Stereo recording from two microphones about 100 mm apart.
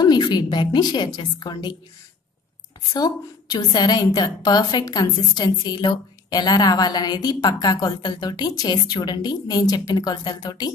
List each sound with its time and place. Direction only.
0.0 s a woman's voice: 45° left (ahead or behind)
2.9 s a woman's voice: 45° left (ahead or behind)